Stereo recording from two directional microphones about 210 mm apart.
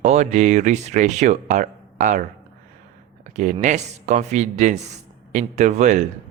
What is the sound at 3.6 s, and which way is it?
Speech, 35° right (ahead or behind).